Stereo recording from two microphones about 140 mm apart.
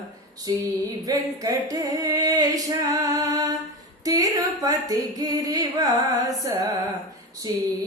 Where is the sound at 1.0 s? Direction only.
25° right (ahead or behind).